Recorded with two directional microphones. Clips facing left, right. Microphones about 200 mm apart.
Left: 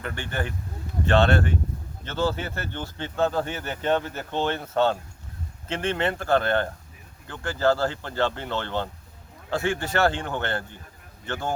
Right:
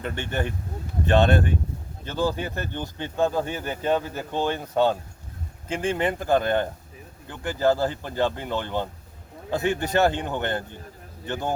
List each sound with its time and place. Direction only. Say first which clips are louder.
0.0 s speech: right 3 dB; 20° right (ahead or behind)